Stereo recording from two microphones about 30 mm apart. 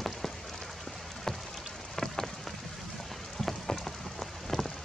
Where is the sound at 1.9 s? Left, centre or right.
Centre.